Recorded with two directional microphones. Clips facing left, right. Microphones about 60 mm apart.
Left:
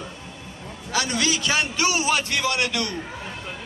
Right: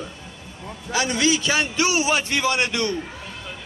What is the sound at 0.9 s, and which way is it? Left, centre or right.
A man's voice, right.